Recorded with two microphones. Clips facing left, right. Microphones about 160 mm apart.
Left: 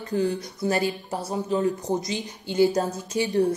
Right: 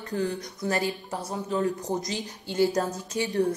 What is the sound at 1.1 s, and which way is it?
Speech, 10° left (ahead or behind).